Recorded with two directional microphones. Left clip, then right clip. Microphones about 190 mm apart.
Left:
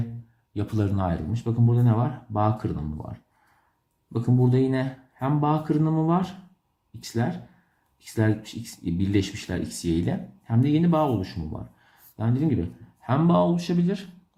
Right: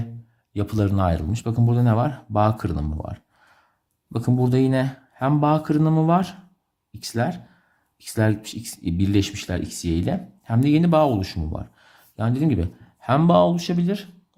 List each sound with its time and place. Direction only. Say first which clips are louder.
0.5 s speech: right 4 dB; 30° right (ahead or behind)